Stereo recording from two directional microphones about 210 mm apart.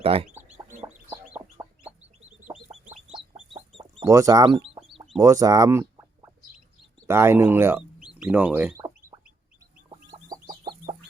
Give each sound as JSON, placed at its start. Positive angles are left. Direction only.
{"t": 0.0, "sound": "speech", "side_deg": -25}
{"t": 0.3, "sound": "chicken", "side_deg": -5}
{"t": 3.3, "sound": "chicken", "side_deg": -30}
{"t": 4.0, "sound": "chicken", "side_deg": -15}
{"t": 5.2, "sound": "speech", "side_deg": -15}
{"t": 9.9, "sound": "chicken", "side_deg": -20}